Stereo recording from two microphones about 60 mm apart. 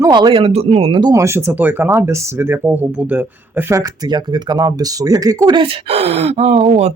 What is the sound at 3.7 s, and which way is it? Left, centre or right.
Speech, right.